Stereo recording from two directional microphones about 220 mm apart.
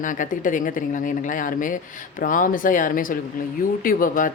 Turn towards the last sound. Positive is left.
turn(degrees=40)  # may be behind; listen again after turning